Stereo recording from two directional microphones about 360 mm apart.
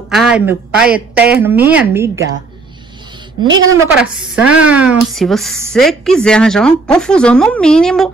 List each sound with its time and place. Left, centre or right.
0.1 s speech: centre
3.4 s a woman's voice: right
3.8 s speech: centre